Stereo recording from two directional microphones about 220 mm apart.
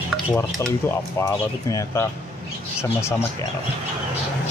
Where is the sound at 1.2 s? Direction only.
15° left (ahead or behind).